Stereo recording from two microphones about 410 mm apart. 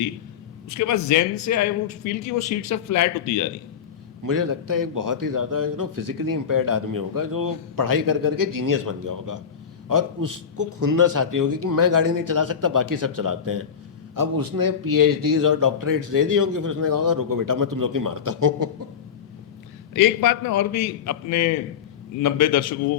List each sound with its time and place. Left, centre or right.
0.8 s a man's voice: left
4.3 s a man's voice: right
19.9 s a man's voice: left